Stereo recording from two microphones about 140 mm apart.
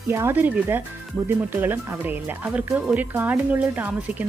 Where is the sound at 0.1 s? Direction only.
20° right (ahead or behind).